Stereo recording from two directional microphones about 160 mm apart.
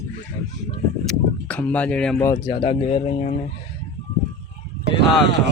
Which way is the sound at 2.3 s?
30° left (ahead or behind).